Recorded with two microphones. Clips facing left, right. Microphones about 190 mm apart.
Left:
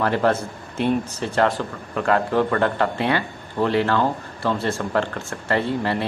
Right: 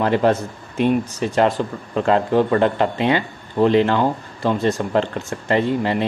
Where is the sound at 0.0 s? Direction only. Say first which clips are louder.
Right 3 dB; 20° right (ahead or behind).